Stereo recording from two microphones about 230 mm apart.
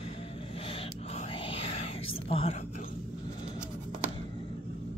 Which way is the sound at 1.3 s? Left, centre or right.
Left.